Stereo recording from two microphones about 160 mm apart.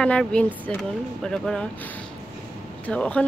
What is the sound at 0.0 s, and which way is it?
Speech, 5° left (ahead or behind).